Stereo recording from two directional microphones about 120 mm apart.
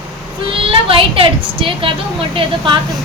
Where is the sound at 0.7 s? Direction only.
50° right (ahead or behind).